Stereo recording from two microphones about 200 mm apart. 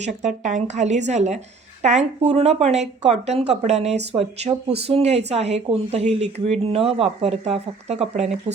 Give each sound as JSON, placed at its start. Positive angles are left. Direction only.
{"t": 0.0, "sound": "speech", "side_deg": -35}